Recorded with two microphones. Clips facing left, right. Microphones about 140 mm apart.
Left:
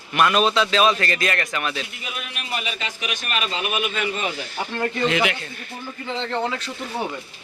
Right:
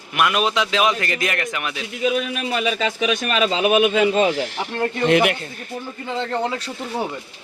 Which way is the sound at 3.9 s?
90° right.